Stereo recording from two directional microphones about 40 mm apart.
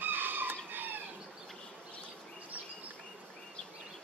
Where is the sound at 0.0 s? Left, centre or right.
Right.